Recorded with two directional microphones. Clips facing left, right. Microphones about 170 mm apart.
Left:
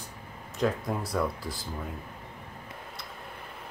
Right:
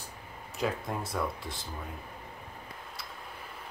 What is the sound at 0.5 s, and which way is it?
Speech, centre (ahead or behind).